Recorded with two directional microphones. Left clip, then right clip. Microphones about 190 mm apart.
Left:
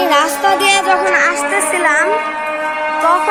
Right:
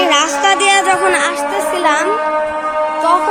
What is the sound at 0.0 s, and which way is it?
Music, 5° right (ahead or behind).